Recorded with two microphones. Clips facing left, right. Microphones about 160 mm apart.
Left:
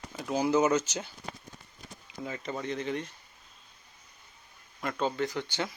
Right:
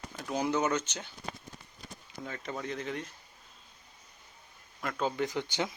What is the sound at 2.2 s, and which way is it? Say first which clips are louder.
Speech: left 3 dB; 5° left (ahead or behind).